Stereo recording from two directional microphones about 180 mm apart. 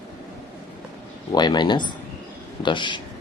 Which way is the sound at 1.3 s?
25° left (ahead or behind).